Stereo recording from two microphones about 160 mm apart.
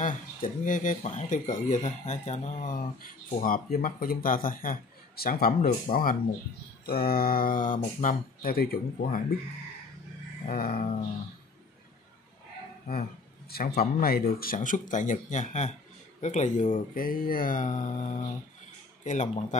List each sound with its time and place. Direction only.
0.0 s speech: 55° left (ahead or behind)
10.4 s speech: 60° left (ahead or behind)
13.5 s speech: 75° left (ahead or behind); by 19.6 s 45° left (ahead or behind)